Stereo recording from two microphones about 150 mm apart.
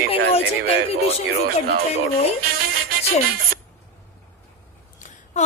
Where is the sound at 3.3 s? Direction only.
90° right.